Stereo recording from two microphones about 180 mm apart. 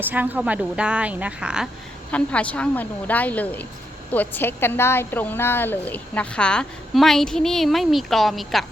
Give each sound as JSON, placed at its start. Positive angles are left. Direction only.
{"t": 0.0, "sound": "a woman's voice", "side_deg": -10}
{"t": 2.1, "sound": "a woman's voice", "side_deg": 5}